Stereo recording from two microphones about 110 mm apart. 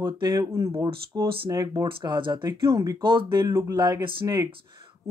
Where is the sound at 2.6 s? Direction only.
30° right (ahead or behind).